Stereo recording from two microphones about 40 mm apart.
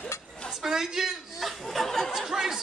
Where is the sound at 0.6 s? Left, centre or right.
Centre.